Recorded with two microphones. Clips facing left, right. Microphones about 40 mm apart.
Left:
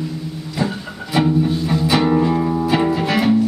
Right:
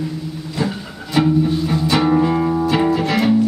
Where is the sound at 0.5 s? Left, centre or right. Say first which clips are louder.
Even; centre.